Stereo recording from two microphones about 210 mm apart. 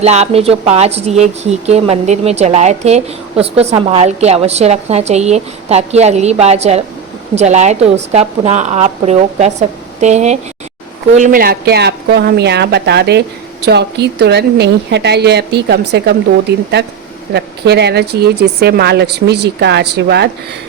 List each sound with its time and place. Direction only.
0.0 s a woman's voice: 30° right (ahead or behind); by 20.3 s 50° right (ahead or behind)